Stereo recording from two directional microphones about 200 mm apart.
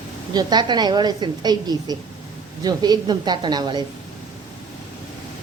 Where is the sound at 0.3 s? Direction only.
20° right (ahead or behind).